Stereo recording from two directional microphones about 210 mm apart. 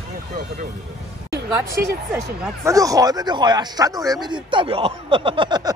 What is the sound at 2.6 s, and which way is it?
Speech, 15° right (ahead or behind).